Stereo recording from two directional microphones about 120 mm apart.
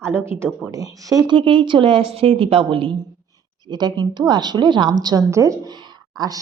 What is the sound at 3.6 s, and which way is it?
A woman's voice, 35° right (ahead or behind).